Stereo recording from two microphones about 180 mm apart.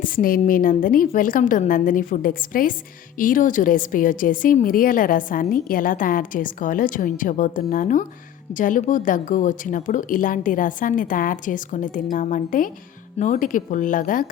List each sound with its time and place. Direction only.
0.0 s a woman's voice: 50° left (ahead or behind)